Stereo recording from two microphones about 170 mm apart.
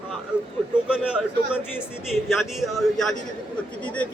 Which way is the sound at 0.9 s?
5° right (ahead or behind).